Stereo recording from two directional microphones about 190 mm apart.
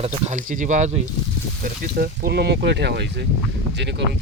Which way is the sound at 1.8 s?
55° right (ahead or behind).